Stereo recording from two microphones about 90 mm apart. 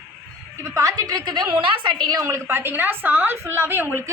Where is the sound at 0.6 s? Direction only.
35° right (ahead or behind).